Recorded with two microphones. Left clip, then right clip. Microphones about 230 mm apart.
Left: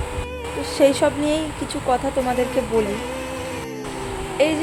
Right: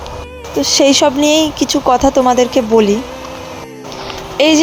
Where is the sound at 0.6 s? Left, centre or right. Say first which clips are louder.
Right 7 dB; right.